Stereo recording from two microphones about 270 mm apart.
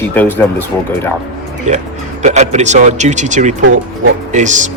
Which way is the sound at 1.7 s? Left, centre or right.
Right.